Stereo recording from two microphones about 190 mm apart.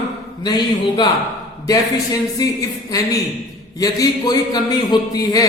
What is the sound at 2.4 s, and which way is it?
A man's voice, 20° left (ahead or behind).